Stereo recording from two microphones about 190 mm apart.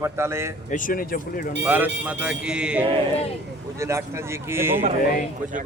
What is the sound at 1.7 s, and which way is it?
A man's voice, 10° right (ahead or behind).